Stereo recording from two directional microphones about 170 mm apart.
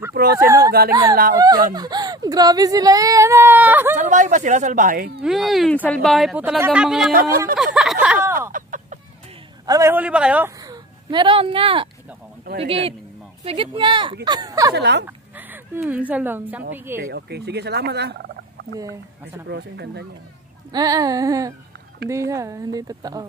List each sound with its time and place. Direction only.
0.1 s speech: 60° right (ahead or behind)
0.4 s a man's voice: 15° right (ahead or behind)
3.9 s a woman's voice: 45° right (ahead or behind)
5.2 s speech: centre (ahead or behind)
7.1 s speech: 60° right (ahead or behind)
7.5 s a sound: 5° right (ahead or behind)
8.4 s a sound: 50° right (ahead or behind)
9.7 s a man's voice: 15° right (ahead or behind)
10.6 s speech: 25° right (ahead or behind)
14.8 s speech: 90° right
15.0 s a man's voice: 10° right (ahead or behind)
17.0 s fowl: 75° right (ahead or behind)
19.5 s speech: 80° right
20.7 s speech: 20° right (ahead or behind)